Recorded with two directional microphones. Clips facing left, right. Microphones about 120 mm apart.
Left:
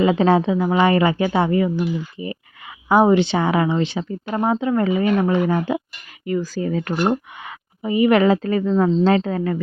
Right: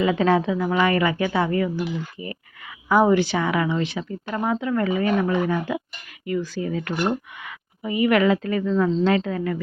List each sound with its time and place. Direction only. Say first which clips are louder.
0.0 s a woman's voice: left 3 dB; 30° left (ahead or behind)